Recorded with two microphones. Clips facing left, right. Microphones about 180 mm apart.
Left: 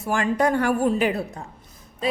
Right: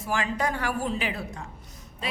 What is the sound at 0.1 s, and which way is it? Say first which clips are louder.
A woman's voice: left 7 dB; 50° left (ahead or behind).